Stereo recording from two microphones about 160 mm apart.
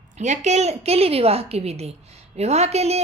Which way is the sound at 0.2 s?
45° right (ahead or behind).